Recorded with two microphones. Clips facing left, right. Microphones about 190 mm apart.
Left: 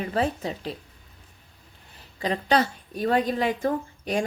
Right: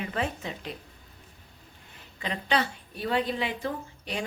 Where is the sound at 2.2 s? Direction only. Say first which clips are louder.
Left 5 dB; 40° left (ahead or behind).